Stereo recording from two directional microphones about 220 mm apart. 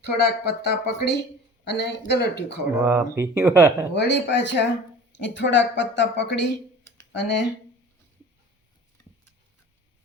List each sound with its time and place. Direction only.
0.4 s speech: 50° left (ahead or behind)
2.7 s speech: 10° right (ahead or behind)
3.9 s a woman's voice: 50° left (ahead or behind)